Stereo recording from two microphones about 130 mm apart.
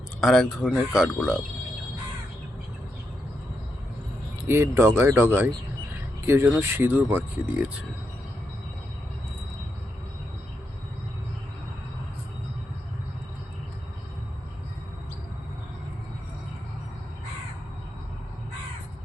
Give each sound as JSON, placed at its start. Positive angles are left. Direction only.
{"t": 0.2, "sound": "speech", "side_deg": 0}
{"t": 4.4, "sound": "speech", "side_deg": -20}